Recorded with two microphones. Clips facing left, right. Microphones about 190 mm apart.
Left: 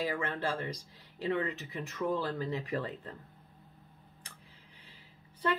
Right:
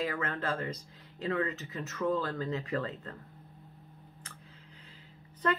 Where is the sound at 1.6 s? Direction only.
15° left (ahead or behind).